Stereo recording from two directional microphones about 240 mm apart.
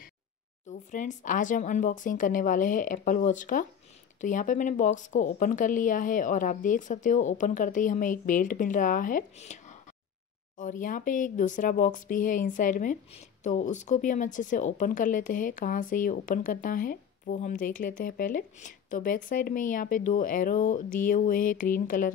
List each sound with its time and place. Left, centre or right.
0.7 s a woman's voice: left
10.6 s a woman's voice: left